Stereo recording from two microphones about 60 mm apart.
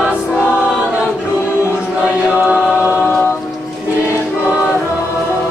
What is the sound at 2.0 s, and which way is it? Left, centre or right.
Choir, right.